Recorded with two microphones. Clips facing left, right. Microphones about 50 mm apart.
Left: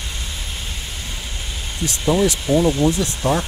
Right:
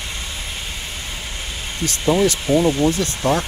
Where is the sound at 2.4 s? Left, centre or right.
Right.